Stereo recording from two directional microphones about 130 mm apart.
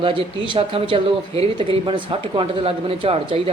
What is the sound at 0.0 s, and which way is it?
A man's voice, 40° right (ahead or behind).